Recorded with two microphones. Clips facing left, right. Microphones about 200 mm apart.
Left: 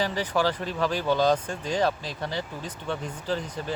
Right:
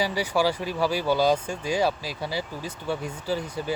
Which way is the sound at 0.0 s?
10° right (ahead or behind).